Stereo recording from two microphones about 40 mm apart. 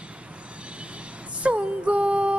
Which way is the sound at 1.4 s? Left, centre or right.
Right.